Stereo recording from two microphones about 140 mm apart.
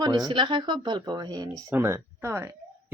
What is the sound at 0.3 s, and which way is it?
Speech, 35° right (ahead or behind).